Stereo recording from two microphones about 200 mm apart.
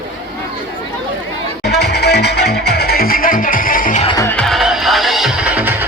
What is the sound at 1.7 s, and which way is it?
Music, 55° left (ahead or behind).